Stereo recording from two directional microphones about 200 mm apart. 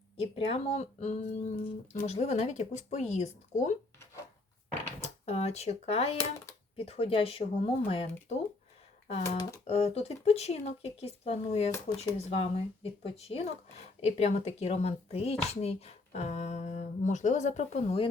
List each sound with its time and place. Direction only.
0.2 s speech: 30° left (ahead or behind)
4.9 s speech: 30° left (ahead or behind)
9.2 s speech: 15° left (ahead or behind)
9.6 s speech: 30° left (ahead or behind)